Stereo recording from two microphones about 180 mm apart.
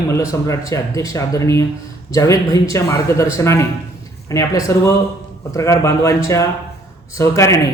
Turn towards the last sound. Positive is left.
turn(degrees=15)  # may be behind; listen again after turning